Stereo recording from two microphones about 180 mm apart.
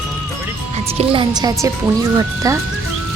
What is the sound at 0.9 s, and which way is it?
Speech, 30° right (ahead or behind).